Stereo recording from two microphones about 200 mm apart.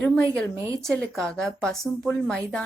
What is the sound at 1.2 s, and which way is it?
Speech, 5° left (ahead or behind).